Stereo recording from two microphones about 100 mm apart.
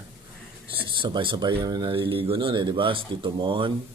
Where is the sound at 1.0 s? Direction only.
55° right (ahead or behind).